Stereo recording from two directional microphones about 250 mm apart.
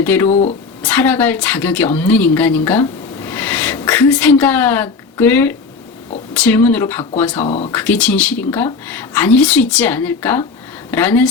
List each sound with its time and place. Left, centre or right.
0.0 s a woman's voice: centre
7.4 s speech: left
7.7 s speech: centre